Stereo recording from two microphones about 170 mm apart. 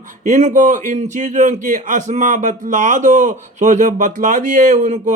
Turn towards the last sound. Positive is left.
turn(degrees=-45)  # may be behind; listen again after turning